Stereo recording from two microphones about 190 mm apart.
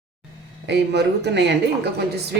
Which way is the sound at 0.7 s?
65° right (ahead or behind).